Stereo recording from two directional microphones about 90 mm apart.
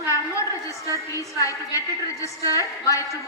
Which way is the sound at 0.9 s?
40° left (ahead or behind).